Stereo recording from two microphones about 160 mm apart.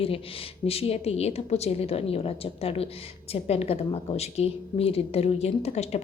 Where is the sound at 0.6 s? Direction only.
40° left (ahead or behind).